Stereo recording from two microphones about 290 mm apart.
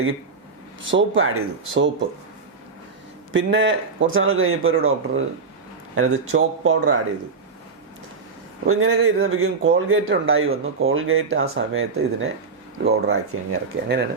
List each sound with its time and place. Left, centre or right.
0.9 s speech: right
3.3 s speech: right
8.6 s speech: right